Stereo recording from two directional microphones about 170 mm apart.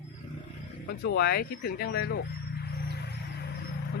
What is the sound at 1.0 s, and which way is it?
Cricket, 65° left (ahead or behind).